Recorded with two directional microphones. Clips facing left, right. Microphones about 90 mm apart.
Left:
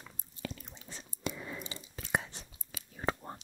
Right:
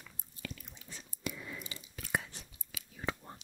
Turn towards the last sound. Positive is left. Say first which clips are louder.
# left 4 dB
turn(degrees=45)  # may be behind; listen again after turning